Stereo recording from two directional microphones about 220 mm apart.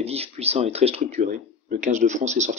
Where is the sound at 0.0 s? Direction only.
30° right (ahead or behind).